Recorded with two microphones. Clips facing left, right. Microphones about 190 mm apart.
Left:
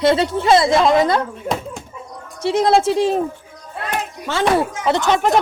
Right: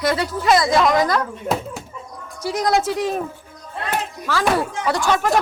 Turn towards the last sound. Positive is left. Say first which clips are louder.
# left 3 dB
turn(degrees=20)  # may be behind; listen again after turning